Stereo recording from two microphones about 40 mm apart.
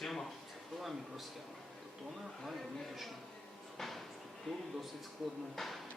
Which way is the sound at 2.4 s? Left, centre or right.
Centre.